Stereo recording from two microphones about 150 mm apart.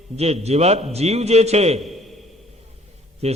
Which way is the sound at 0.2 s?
45° right (ahead or behind).